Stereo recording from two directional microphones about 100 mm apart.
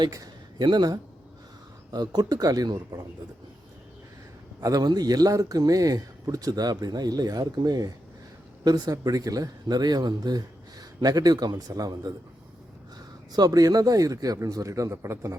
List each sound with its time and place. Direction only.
0.6 s speech: 45° right (ahead or behind)
4.6 s speech: 40° right (ahead or behind)
13.3 s speech: 40° right (ahead or behind)